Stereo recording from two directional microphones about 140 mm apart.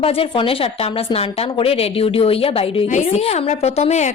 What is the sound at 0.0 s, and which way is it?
Speech, 40° left (ahead or behind).